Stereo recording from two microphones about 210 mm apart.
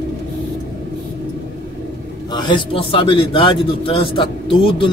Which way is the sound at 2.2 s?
20° left (ahead or behind).